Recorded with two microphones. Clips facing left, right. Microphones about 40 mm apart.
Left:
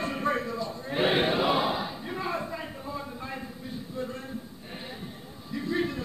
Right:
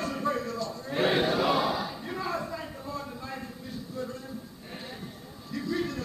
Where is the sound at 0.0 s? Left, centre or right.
Left.